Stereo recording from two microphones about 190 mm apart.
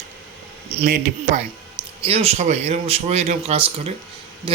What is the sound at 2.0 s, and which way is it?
Speech, 30° right (ahead or behind).